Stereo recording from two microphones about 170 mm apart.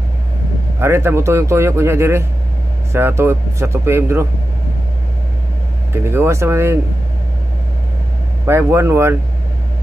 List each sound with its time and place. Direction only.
0.7 s a man's voice: 15° right (ahead or behind)
6.0 s a man's voice: 15° right (ahead or behind)
8.5 s a man's voice: 15° right (ahead or behind)